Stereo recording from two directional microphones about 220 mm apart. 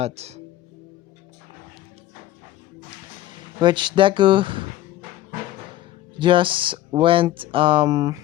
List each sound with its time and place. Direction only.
0.0 s speech: 30° right (ahead or behind)
3.3 s speech: 20° right (ahead or behind)
6.1 s speech: 20° right (ahead or behind)